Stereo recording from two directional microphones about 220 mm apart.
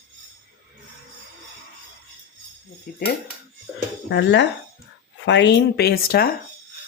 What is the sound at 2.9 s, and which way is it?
Speech, 45° left (ahead or behind).